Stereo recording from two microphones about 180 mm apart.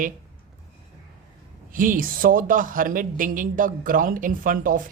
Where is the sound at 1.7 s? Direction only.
50° right (ahead or behind).